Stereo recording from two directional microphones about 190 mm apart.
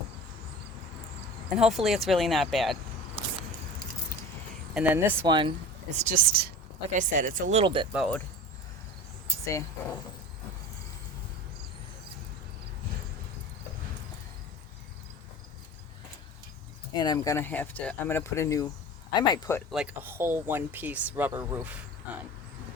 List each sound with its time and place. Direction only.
1.5 s speech: centre (ahead or behind)
4.7 s speech: 5° right (ahead or behind)
5.3 s speech: 25° right (ahead or behind)
6.0 s speech: 45° right (ahead or behind)
6.9 s speech: 45° right (ahead or behind)
7.6 s speech: 25° right (ahead or behind)
7.9 s speech: centre (ahead or behind)
9.4 s speech: 15° left (ahead or behind)
16.9 s speech: 20° left (ahead or behind)
19.7 s speech: 5° right (ahead or behind)